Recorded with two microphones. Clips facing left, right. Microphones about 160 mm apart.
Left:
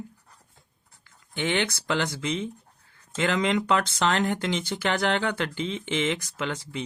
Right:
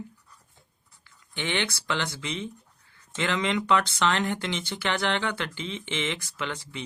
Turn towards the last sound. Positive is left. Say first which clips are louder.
# left 3 dB
turn(degrees=40)  # may be behind; listen again after turning